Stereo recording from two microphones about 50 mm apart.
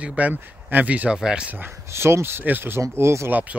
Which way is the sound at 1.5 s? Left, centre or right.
Right.